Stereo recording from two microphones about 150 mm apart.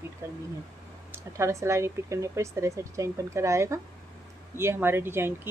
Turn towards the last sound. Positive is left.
turn(degrees=-15)  # may be behind; listen again after turning